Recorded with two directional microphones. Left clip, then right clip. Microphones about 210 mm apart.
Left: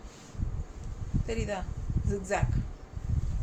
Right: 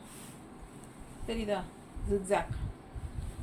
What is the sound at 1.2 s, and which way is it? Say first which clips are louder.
Speech: even; 25° left (ahead or behind).